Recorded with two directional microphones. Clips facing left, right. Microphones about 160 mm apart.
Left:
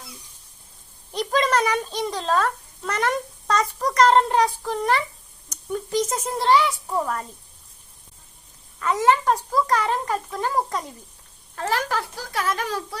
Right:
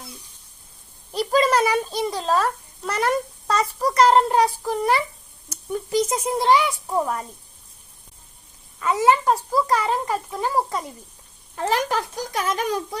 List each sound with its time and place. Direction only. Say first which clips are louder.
1.1 s a child's voice: right 2 dB; 5° right (ahead or behind)
8.8 s a child's voice: right 1 dB; 10° right (ahead or behind)
11.5 s speech: right 2 dB; 20° right (ahead or behind)